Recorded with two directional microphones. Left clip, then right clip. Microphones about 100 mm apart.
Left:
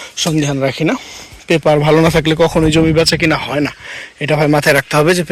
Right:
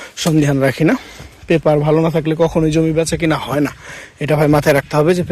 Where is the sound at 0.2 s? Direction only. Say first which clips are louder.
Right 1 dB; 70° right (ahead or behind).